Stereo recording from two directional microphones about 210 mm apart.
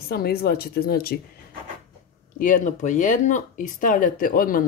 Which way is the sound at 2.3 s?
40° left (ahead or behind).